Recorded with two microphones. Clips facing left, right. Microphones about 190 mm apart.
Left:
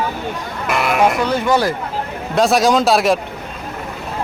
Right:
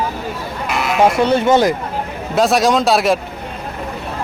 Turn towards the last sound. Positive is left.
turn(degrees=0)  # may be behind; listen again after turning